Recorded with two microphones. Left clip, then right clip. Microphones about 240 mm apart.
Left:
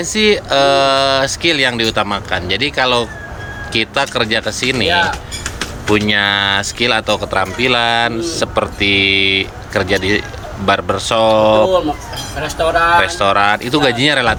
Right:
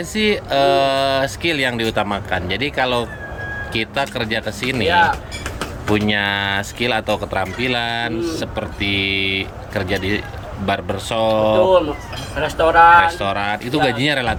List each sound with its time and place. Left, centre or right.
0.1 s speech: centre
6.1 s speech: centre
13.1 s speech: centre